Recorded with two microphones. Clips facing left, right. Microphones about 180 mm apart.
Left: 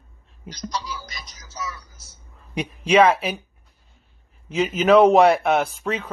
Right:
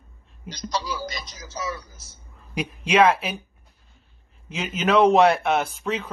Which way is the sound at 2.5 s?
Centre (ahead or behind).